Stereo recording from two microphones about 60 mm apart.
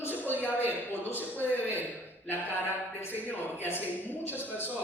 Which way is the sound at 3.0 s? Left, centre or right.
Left.